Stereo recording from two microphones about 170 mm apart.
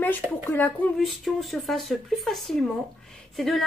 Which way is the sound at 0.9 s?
Centre (ahead or behind).